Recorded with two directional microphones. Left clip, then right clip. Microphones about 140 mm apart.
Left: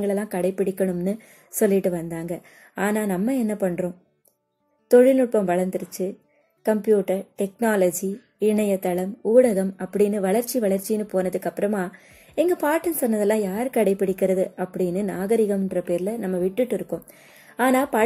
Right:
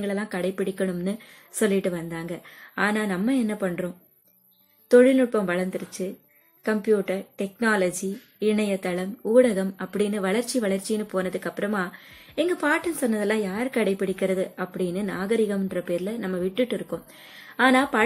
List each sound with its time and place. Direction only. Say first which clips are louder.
0.0 s a woman's voice: left 4 dB; 40° left (ahead or behind)